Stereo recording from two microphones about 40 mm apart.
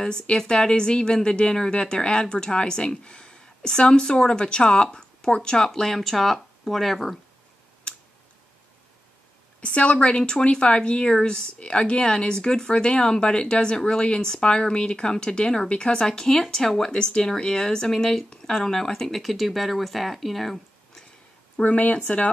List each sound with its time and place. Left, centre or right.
0.0 s speech: left
5.7 s speech: centre
9.6 s speech: left; by 21.0 s centre
21.6 s speech: left